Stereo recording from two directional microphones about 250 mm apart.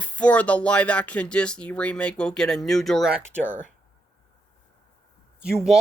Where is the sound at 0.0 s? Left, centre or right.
Centre.